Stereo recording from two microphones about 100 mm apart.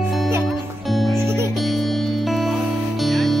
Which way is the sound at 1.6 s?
Centre (ahead or behind).